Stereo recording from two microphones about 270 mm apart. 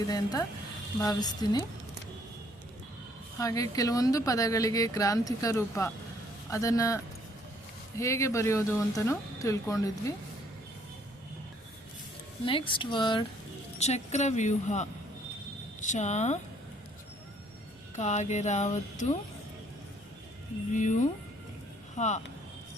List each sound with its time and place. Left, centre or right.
0.1 s a woman's voice: centre
3.3 s a woman's voice: centre
12.5 s a woman's voice: centre
13.7 s music: left
17.9 s music: left
20.7 s music: left
21.9 s speech: left